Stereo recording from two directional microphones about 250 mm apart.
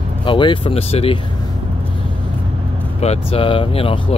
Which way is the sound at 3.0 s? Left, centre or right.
Left.